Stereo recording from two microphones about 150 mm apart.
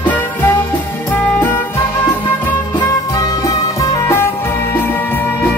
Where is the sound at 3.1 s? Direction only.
20° left (ahead or behind).